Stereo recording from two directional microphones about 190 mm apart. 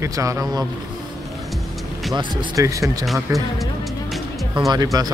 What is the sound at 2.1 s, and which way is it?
Speech, 15° right (ahead or behind).